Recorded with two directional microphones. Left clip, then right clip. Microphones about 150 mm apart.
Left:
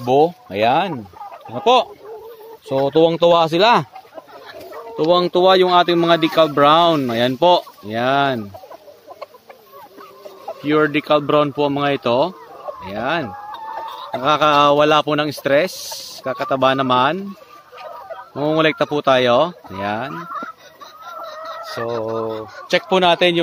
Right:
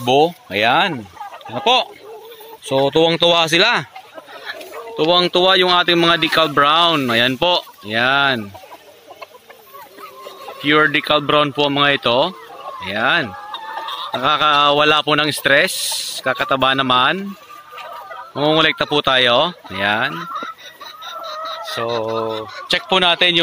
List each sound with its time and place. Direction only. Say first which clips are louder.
0.0 s speech: right 1 dB; 5° left (ahead or behind)
2.7 s speech: even; 5° left (ahead or behind)
4.5 s speech: right 4 dB; 20° left (ahead or behind)
10.6 s speech: right 3 dB; 5° left (ahead or behind)
13.3 s chicken: right 1 dB; 65° left (ahead or behind)
14.2 s speech: even; 5° left (ahead or behind)
18.4 s speech: right 2 dB; 5° left (ahead or behind)
22.2 s speech: right 2 dB; 10° left (ahead or behind)